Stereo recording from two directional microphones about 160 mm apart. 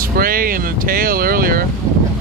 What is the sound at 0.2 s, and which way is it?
Vehicle, 65° right (ahead or behind).